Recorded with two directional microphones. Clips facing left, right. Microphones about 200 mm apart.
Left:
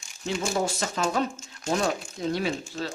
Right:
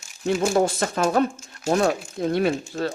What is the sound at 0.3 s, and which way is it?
Speech, 55° right (ahead or behind).